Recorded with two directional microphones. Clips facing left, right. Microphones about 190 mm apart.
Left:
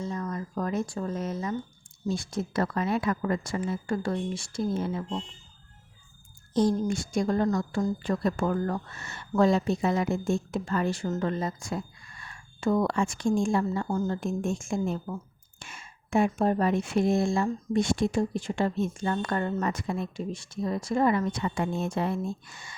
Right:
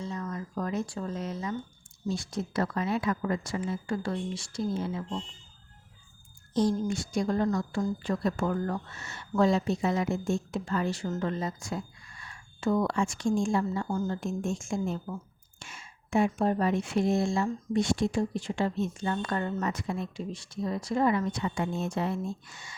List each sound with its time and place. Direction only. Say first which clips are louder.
0.0 s a sound: left 3 dB; 45° left (ahead or behind)
2.0 s speech: left 2 dB; 50° left (ahead or behind)
6.5 s speech: left 2 dB; 50° left (ahead or behind)